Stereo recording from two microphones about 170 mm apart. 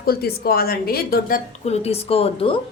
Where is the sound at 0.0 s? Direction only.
65° left (ahead or behind).